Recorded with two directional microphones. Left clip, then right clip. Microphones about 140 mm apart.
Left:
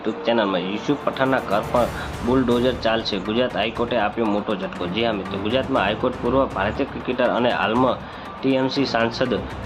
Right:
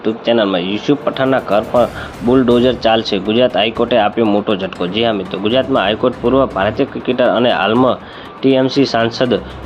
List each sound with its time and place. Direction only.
0.0 s speech: 30° right (ahead or behind)